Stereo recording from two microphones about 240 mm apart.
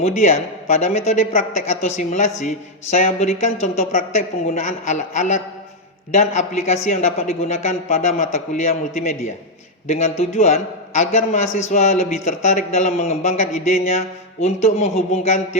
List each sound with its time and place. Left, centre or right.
0.0 s speech: left